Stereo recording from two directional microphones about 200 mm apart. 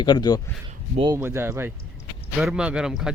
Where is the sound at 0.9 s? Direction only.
25° right (ahead or behind).